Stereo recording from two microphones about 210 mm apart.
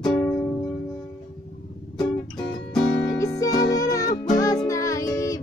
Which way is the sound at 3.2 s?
15° left (ahead or behind).